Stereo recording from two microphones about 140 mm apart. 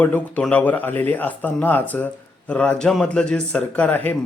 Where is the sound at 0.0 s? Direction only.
10° left (ahead or behind).